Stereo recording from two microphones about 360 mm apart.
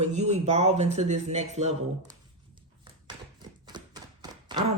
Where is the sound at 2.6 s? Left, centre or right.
Centre.